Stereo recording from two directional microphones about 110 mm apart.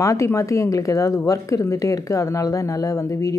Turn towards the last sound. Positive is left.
turn(degrees=30)  # may be behind; listen again after turning